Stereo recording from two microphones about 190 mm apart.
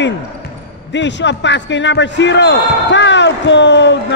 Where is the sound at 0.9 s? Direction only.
70° left (ahead or behind).